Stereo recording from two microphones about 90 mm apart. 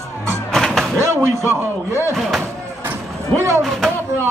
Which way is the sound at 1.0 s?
30° right (ahead or behind).